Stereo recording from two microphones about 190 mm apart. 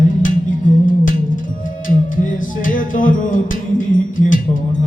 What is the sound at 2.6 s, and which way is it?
Music, 45° left (ahead or behind).